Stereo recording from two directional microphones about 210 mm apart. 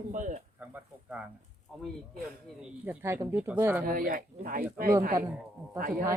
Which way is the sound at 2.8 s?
10° right (ahead or behind).